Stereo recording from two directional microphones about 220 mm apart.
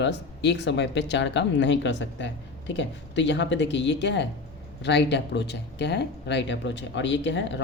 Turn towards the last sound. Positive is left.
turn(degrees=55)  # may be behind; listen again after turning